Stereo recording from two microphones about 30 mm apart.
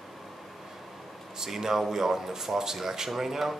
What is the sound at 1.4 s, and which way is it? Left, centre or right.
Speech, centre.